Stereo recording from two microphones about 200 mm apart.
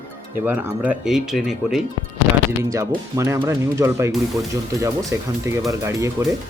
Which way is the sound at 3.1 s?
15° right (ahead or behind).